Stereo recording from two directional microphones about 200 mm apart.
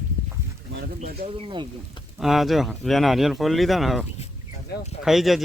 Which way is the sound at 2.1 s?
Centre (ahead or behind).